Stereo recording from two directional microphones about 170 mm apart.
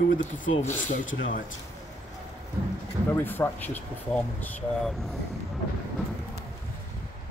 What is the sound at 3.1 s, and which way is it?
Speech, 10° left (ahead or behind).